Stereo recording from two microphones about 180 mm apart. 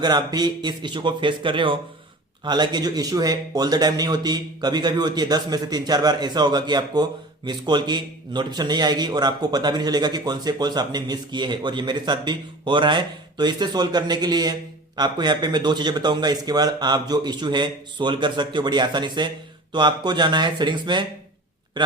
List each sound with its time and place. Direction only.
0.0 s speech: 20° right (ahead or behind)